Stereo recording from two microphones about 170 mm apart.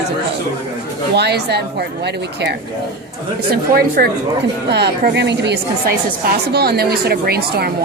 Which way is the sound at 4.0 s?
60° right (ahead or behind).